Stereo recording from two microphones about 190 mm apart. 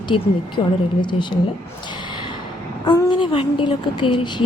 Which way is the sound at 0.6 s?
30° left (ahead or behind).